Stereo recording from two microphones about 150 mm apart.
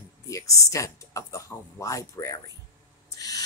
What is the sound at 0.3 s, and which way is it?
Speech, 20° left (ahead or behind).